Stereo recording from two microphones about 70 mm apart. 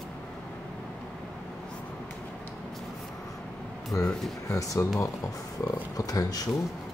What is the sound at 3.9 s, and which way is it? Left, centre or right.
Speech, left.